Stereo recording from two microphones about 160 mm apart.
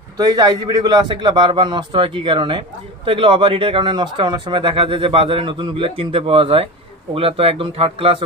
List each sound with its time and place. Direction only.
0.2 s a man's voice: 25° right (ahead or behind)